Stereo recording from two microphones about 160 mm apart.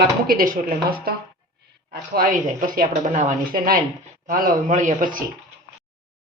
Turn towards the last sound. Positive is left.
turn(degrees=-60)  # may be behind; listen again after turning